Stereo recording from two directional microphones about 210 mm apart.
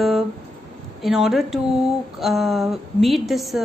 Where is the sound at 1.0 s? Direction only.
Centre (ahead or behind).